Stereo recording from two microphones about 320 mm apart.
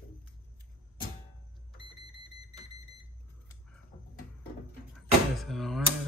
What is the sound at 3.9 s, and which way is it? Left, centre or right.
Music, centre.